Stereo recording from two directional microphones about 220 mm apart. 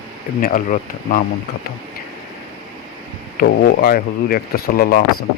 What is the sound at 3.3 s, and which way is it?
Speech, 45° left (ahead or behind).